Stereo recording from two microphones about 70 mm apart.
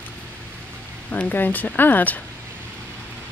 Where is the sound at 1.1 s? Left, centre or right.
Left.